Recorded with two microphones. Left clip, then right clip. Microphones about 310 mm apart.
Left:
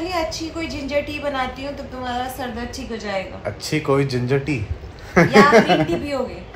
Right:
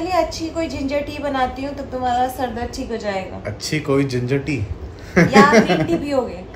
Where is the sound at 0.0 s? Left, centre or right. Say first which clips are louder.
Right 4 dB; centre.